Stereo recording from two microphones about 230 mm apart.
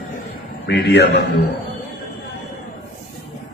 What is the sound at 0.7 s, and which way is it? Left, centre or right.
Speech, left.